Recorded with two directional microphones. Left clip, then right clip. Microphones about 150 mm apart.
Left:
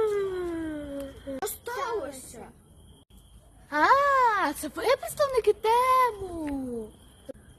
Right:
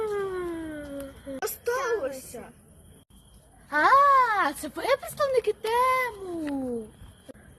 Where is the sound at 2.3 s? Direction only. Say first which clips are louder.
Right 4 dB; 40° left (ahead or behind).